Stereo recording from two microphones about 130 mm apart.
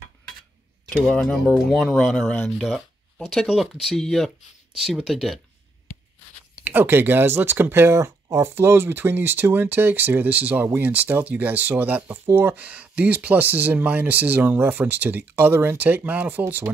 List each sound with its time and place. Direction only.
0.8 s speech: 5° left (ahead or behind)
2.6 s speech: centre (ahead or behind)
6.6 s speech: 15° right (ahead or behind)